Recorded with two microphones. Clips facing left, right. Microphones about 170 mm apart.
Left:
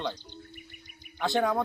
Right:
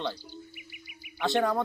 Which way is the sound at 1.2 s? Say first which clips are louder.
Even; centre (ahead or behind).